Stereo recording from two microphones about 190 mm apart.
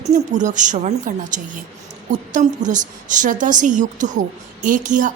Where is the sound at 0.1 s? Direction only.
40° right (ahead or behind).